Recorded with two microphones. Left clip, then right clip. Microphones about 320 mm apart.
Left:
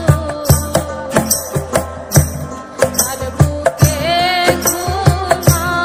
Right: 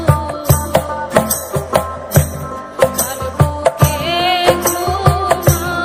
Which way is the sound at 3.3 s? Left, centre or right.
Centre.